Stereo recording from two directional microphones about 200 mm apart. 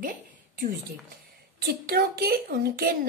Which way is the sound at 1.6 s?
50° right (ahead or behind).